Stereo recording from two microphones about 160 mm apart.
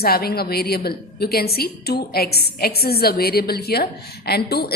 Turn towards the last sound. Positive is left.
turn(degrees=80)